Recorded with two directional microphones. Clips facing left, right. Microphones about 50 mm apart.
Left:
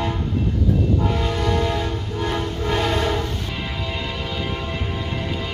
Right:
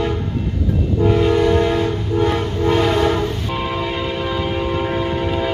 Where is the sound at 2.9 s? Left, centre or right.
Right.